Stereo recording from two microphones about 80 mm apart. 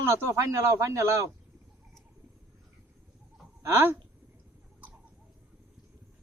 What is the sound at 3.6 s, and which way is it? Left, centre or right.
Speech, right.